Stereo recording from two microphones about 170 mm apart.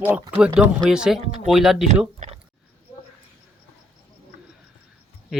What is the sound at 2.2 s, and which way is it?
Speech, 45° right (ahead or behind).